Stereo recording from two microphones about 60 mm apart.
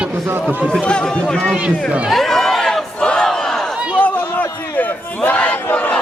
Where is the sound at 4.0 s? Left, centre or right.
Left.